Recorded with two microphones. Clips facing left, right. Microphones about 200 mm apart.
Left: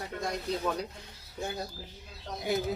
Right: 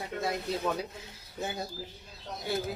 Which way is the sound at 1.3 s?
5° right (ahead or behind).